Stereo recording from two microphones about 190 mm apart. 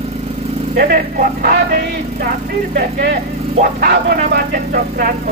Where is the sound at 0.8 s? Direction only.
50° right (ahead or behind).